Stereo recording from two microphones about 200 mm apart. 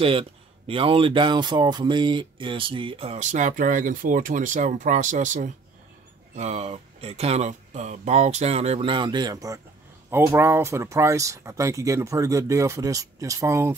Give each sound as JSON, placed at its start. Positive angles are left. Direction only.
{"t": 0.0, "sound": "speech", "side_deg": -25}